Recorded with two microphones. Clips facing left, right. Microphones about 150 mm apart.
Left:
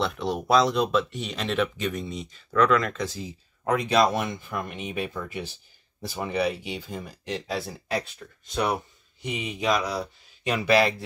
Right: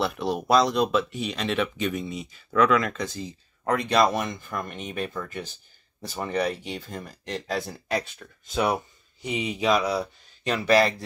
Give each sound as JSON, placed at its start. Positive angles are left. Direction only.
{"t": 0.0, "sound": "speech", "side_deg": -5}